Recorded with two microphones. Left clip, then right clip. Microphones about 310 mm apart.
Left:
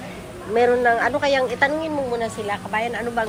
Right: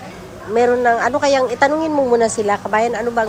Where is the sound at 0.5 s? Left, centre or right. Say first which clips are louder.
Right 3 dB; centre.